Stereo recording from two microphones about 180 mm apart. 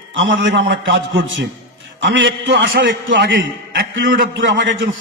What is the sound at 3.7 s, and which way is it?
A man's voice, 85° right.